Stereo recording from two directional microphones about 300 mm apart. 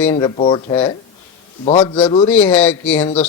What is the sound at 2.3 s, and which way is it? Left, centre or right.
Speech, centre.